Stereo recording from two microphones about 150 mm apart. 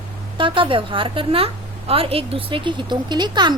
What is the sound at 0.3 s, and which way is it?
A woman's voice, 35° right (ahead or behind).